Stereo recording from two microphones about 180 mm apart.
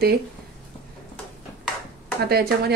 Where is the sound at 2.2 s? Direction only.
60° right (ahead or behind).